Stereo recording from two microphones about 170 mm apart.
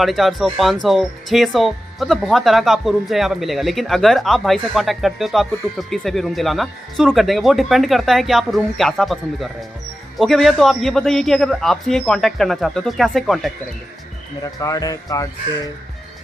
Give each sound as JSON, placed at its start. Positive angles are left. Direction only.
{"t": 0.0, "sound": "speech", "side_deg": 0}
{"t": 14.4, "sound": "speech", "side_deg": 20}